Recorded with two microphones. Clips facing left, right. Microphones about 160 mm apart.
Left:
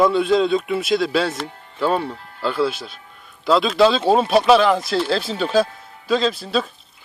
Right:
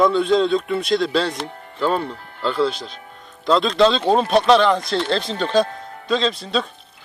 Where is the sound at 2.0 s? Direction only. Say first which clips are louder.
Left 1 dB; 60° right (ahead or behind).